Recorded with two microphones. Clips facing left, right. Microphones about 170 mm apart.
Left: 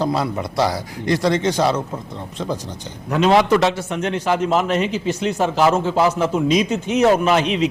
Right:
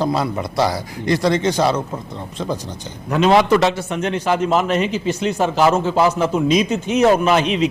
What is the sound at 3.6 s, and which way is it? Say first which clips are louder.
A man's voice: right 1 dB; 10° right (ahead or behind).